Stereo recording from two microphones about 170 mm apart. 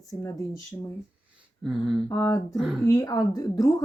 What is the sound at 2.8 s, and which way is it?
Speech, 20° left (ahead or behind).